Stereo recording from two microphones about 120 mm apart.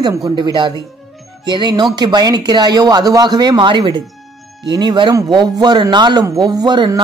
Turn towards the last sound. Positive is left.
turn(degrees=-40)  # may be behind; listen again after turning